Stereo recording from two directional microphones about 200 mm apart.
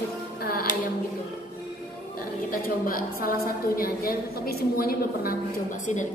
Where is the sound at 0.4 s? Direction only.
50° left (ahead or behind).